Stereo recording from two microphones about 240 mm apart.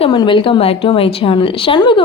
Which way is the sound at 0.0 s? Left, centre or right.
Left.